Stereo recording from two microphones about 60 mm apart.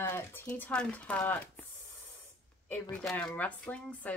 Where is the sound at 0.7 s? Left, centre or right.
Centre.